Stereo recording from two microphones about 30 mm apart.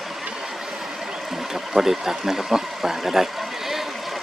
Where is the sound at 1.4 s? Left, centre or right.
Centre.